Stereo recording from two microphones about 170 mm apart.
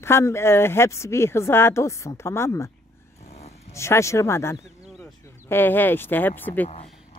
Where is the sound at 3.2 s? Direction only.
40° left (ahead or behind).